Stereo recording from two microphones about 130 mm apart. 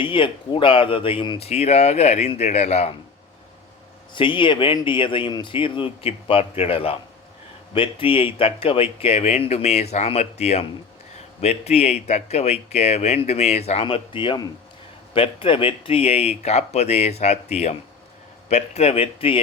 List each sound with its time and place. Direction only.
0.0 s speech: 40° left (ahead or behind)
1.5 s speech: 55° left (ahead or behind)
4.1 s speech: 40° left (ahead or behind); by 13.8 s 55° left (ahead or behind)
13.8 s speech: 40° left (ahead or behind)